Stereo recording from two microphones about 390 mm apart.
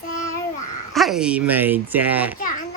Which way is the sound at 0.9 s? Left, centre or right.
Centre.